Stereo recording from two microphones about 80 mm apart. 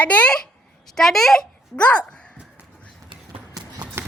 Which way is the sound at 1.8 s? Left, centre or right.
Centre.